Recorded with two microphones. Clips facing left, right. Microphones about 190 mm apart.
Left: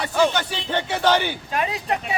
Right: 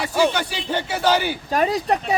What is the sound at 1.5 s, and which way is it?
Speech, 40° right (ahead or behind).